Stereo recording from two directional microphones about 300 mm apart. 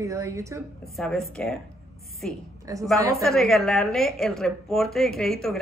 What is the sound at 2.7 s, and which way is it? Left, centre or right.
Speech, centre.